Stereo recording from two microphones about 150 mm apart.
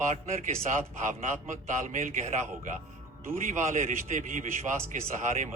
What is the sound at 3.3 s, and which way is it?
A man's voice, 55° right (ahead or behind).